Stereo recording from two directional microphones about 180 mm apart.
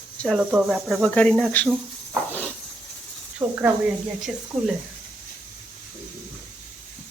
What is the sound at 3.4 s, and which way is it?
Speech, 25° right (ahead or behind).